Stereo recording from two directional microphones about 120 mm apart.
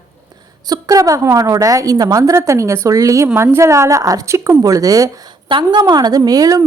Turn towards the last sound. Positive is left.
turn(degrees=-30)  # may be behind; listen again after turning